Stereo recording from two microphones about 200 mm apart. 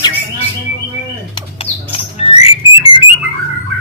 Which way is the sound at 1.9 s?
30° left (ahead or behind).